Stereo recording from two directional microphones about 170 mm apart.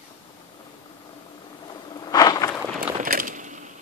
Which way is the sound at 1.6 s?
25° left (ahead or behind).